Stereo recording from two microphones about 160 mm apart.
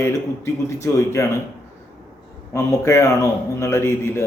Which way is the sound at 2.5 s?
15° left (ahead or behind).